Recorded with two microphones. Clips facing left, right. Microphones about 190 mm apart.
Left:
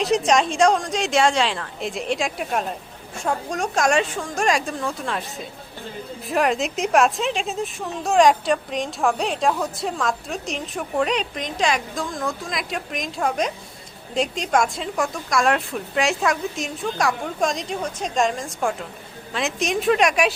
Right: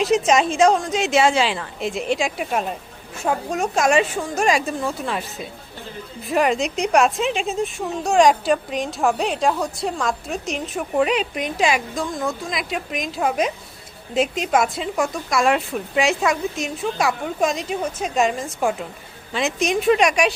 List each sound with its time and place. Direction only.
0.0 s a woman's voice: centre (ahead or behind)
6.2 s a woman's voice: centre (ahead or behind)